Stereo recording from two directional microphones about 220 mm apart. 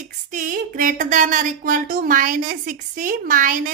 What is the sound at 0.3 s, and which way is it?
Speech, 35° right (ahead or behind).